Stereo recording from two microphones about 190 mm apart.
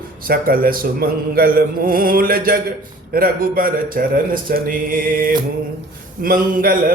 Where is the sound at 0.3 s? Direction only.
50° right (ahead or behind).